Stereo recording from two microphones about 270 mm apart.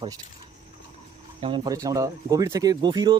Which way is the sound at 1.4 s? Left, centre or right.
Centre.